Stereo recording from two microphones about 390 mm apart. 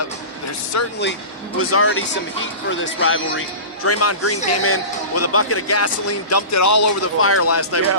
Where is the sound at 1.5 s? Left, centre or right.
Left.